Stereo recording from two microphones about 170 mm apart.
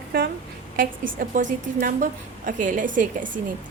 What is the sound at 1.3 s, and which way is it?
A woman's voice, 50° right (ahead or behind).